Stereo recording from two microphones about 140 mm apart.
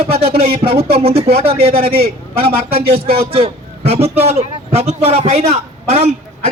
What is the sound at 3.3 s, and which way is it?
A man's voice, 45° right (ahead or behind).